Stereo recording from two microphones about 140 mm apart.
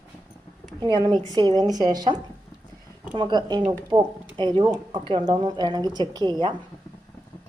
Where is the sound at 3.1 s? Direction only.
30° right (ahead or behind).